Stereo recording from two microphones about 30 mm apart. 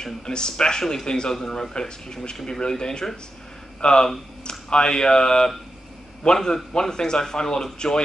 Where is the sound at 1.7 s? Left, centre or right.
Left.